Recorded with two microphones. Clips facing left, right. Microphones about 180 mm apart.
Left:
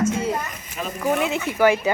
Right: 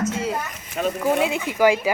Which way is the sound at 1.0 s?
15° right (ahead or behind).